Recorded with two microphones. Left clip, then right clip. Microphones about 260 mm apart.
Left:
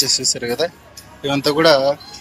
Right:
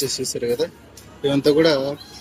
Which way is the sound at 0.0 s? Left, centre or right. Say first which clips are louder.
Left 5 dB; centre.